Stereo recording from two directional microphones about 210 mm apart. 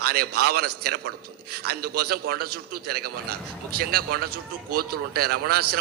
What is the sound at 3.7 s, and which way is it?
A man's voice, 45° right (ahead or behind).